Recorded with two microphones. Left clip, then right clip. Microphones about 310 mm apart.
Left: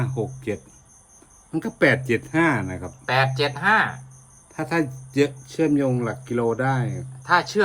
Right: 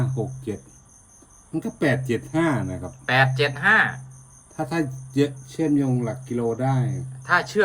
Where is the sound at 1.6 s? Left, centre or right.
Centre.